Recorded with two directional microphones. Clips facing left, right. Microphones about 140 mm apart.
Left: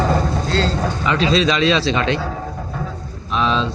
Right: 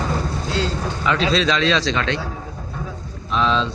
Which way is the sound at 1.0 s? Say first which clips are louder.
Left 2 dB; centre (ahead or behind).